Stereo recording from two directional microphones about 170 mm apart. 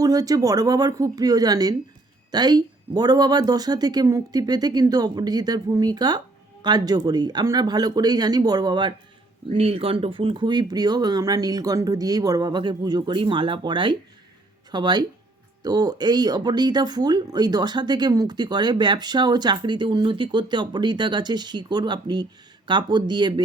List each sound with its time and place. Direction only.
0.0 s speech: 20° right (ahead or behind)